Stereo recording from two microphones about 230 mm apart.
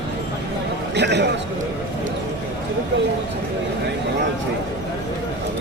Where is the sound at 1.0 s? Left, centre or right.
Right.